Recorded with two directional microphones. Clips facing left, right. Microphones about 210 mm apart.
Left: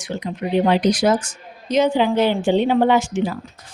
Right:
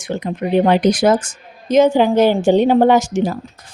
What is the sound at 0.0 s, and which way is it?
Speech, 50° right (ahead or behind).